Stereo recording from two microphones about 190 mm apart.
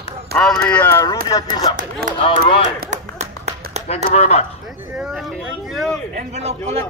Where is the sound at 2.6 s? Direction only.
45° right (ahead or behind).